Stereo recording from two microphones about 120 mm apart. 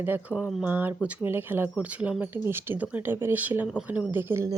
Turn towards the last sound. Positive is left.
turn(degrees=-20)  # may be behind; listen again after turning